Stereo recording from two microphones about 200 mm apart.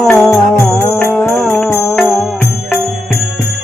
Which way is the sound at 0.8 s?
10° left (ahead or behind).